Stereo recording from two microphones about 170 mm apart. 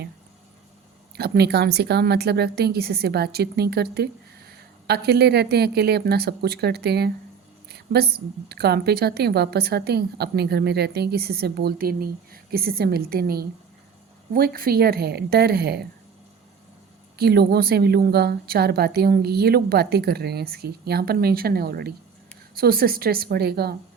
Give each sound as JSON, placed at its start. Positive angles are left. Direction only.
{"t": 1.1, "sound": "a woman's voice", "side_deg": -70}
{"t": 17.2, "sound": "a woman's voice", "side_deg": -70}